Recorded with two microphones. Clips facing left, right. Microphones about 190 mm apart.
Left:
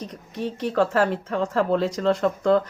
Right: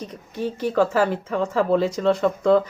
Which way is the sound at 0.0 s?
Centre (ahead or behind).